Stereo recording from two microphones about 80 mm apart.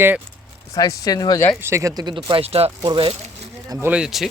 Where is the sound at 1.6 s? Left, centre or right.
Right.